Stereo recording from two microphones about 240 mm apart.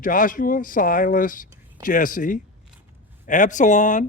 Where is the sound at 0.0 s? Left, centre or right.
Left.